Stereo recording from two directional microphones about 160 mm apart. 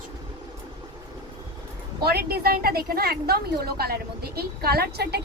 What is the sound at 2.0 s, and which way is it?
A woman's voice, 75° right (ahead or behind).